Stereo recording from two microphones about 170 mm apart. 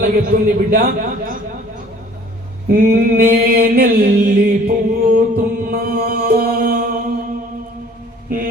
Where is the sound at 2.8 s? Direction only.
60° right (ahead or behind).